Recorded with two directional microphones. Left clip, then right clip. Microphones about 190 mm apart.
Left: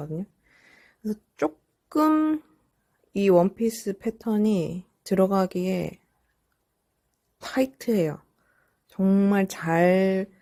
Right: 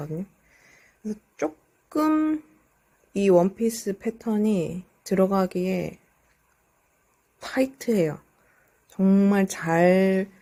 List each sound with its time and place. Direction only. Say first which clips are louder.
0.5 s a sound: even; 20° left (ahead or behind)
1.4 s speech: left 2 dB; 25° left (ahead or behind)
7.3 s speech: right 1 dB; 20° left (ahead or behind)